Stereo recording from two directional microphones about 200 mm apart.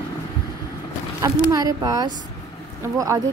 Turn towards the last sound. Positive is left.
turn(degrees=-15)  # may be behind; listen again after turning